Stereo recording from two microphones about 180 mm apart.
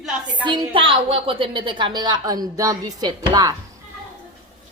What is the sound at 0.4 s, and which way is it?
A woman's voice, 25° right (ahead or behind).